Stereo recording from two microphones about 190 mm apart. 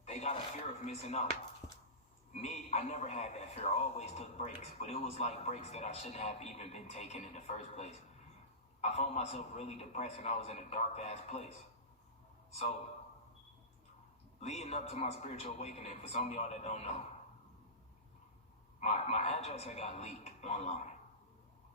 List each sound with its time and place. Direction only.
0.0 s a sound: 35° left (ahead or behind)
2.3 s a man's voice: 35° left (ahead or behind)
14.4 s a man's voice: 35° left (ahead or behind)
18.8 s a man's voice: 35° left (ahead or behind)